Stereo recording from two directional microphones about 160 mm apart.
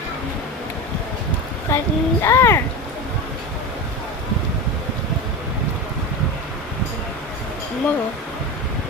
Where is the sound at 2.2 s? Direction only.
15° left (ahead or behind).